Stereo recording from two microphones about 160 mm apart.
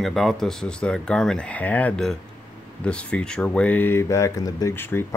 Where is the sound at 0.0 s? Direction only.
Centre (ahead or behind).